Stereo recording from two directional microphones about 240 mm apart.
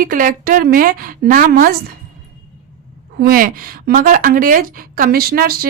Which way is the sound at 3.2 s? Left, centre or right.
Right.